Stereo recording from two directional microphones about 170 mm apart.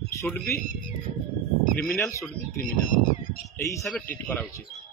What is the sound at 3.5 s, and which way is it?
Speech, 15° left (ahead or behind).